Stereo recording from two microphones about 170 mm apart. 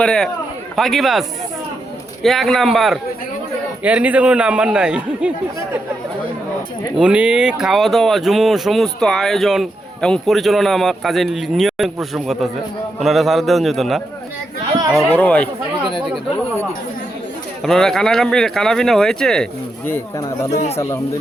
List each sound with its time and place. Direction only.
0.0 s speech: 5° left (ahead or behind)
2.2 s a man's voice: centre (ahead or behind)
6.9 s speech: 5° right (ahead or behind)
15.1 s speech: 10° left (ahead or behind)
17.6 s speech: centre (ahead or behind)